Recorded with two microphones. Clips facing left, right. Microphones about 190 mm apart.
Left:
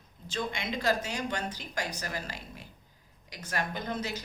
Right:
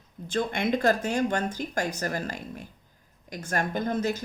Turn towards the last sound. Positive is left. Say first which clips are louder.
# right 8 dB
turn(degrees=-50)  # may be behind; listen again after turning